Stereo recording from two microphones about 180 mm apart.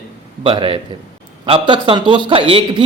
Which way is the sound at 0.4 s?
30° right (ahead or behind).